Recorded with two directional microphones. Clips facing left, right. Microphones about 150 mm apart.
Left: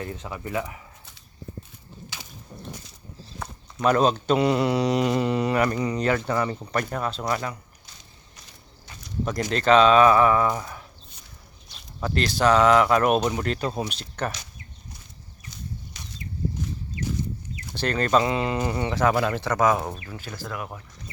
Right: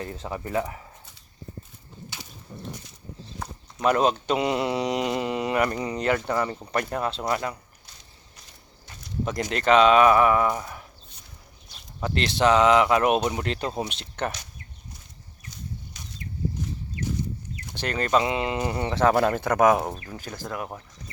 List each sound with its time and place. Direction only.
0.0 s speech: 30° right (ahead or behind)
2.1 s a sound: 90° left
3.8 s speech: 15° right (ahead or behind)
9.5 s speech: 15° right (ahead or behind)
12.0 s speech: 25° right (ahead or behind)
15.4 s a sound: 80° left
17.7 s speech: 15° right (ahead or behind)
19.1 s speech: 45° right (ahead or behind); by 19.7 s 60° right (ahead or behind)